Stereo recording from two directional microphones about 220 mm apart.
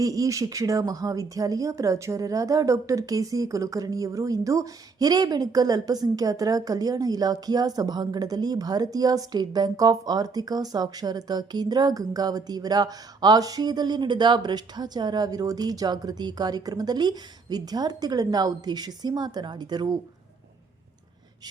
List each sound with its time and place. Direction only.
0.0 s speech: 15° right (ahead or behind)